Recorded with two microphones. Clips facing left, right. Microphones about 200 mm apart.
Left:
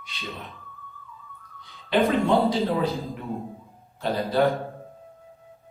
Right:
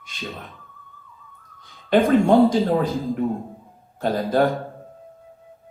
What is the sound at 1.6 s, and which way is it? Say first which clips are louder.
A man's voice: right 4 dB; 45° right (ahead or behind).